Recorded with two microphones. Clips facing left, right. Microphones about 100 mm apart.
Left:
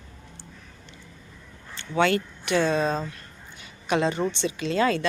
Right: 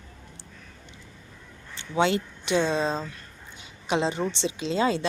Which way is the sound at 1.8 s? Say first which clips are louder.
Left 1 dB; 20° right (ahead or behind).